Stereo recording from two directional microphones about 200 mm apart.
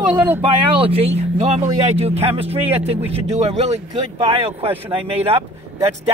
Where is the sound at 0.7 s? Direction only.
30° right (ahead or behind).